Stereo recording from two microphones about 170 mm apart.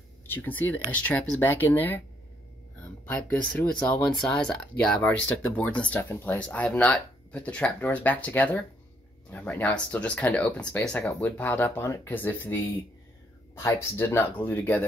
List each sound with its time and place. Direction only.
0.3 s speech: 10° left (ahead or behind)
13.6 s speech: 15° left (ahead or behind)